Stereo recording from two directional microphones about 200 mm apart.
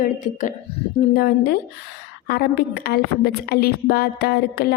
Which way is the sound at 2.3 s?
50° left (ahead or behind).